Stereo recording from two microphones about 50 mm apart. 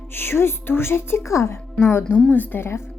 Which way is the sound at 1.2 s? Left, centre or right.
Left.